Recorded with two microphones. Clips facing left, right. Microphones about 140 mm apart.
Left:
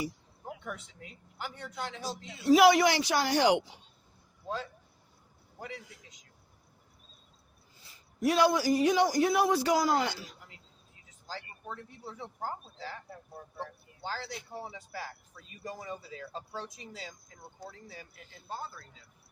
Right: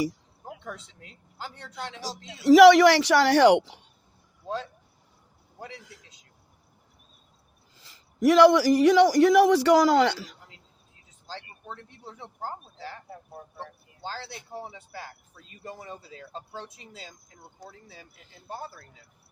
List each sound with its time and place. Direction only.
1.7 s speech: 80° right
7.8 s a man's voice: 90° right
14.6 s speech: 25° right (ahead or behind)